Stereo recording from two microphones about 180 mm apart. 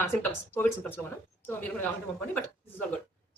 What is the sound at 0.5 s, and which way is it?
Speech, 10° left (ahead or behind).